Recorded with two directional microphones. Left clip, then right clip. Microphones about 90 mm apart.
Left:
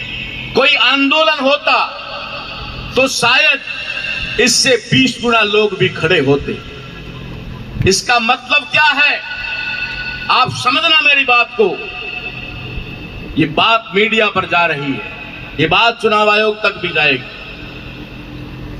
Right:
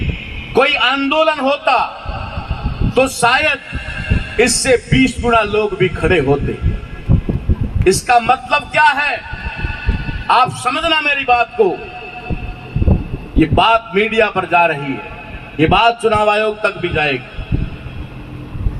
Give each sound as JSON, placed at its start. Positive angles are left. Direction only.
{"t": 0.5, "sound": "a man's voice", "side_deg": -35}
{"t": 7.9, "sound": "a man's voice", "side_deg": -35}
{"t": 13.4, "sound": "a man's voice", "side_deg": -40}